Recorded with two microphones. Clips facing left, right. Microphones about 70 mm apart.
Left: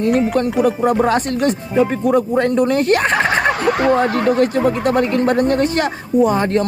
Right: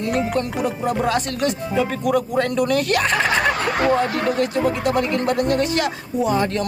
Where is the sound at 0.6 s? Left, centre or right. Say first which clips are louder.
Left 7 dB; left.